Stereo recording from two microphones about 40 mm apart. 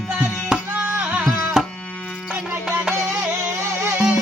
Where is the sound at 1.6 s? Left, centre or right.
Centre.